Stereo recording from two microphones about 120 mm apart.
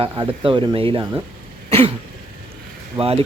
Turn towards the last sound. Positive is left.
turn(degrees=-50)  # may be behind; listen again after turning